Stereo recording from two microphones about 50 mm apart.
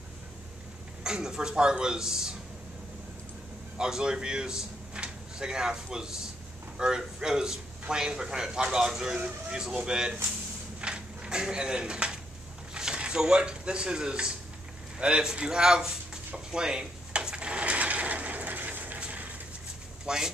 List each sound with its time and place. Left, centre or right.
1.0 s a man's voice: centre
3.7 s a man's voice: centre
10.8 s a sound: centre
12.7 s speech: centre
16.5 s drawer open or close: centre; by 18.9 s right
18.9 s a sound: right
20.1 s vehicle: centre